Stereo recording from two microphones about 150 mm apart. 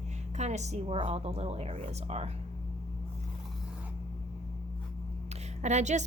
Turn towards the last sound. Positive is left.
turn(degrees=-50)  # may be behind; listen again after turning